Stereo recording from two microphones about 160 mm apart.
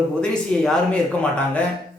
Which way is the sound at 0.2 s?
5° left (ahead or behind).